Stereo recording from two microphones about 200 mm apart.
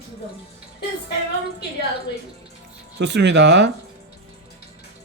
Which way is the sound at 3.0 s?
60° right (ahead or behind).